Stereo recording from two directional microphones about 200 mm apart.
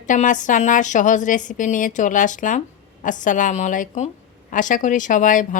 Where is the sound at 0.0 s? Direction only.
40° left (ahead or behind).